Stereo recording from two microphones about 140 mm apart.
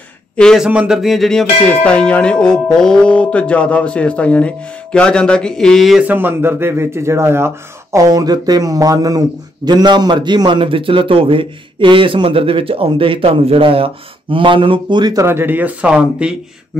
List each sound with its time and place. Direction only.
0.4 s speech: 5° left (ahead or behind)
0.7 s bell: 5° right (ahead or behind)
6.0 s a man's voice: 15° right (ahead or behind)
15.2 s speech: 15° right (ahead or behind)